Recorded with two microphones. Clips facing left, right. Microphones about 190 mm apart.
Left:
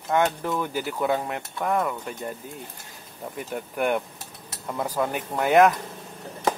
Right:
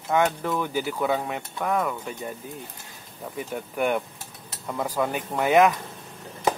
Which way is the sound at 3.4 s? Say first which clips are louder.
Even; centre (ahead or behind).